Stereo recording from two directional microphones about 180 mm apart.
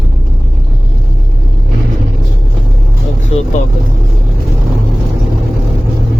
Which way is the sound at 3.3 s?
35° left (ahead or behind).